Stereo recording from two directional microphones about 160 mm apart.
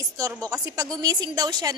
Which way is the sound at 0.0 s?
20° right (ahead or behind).